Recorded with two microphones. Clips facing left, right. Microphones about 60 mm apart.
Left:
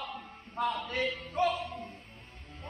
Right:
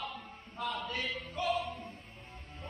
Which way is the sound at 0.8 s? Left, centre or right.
Left.